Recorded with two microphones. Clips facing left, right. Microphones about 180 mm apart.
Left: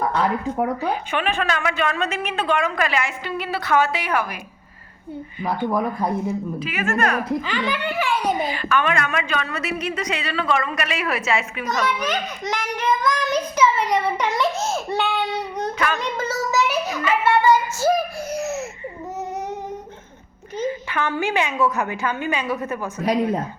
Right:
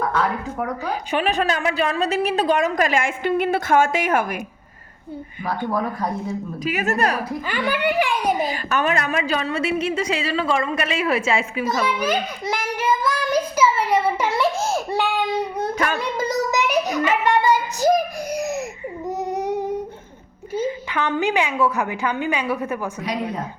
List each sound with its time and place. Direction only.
0.5 s speech: 30° left (ahead or behind)
0.9 s a woman's voice: 40° right (ahead or behind)
5.6 s speech: 15° left (ahead or behind)
6.6 s a woman's voice: 40° right (ahead or behind)
7.4 s a woman's voice: 10° right (ahead or behind)
8.4 s a woman's voice: 40° right (ahead or behind)
11.6 s a child's voice: 10° right (ahead or behind)
14.9 s child singing: 10° right (ahead or behind)
19.0 s a sound: 15° right (ahead or behind)
20.5 s a woman's voice: 10° right (ahead or behind)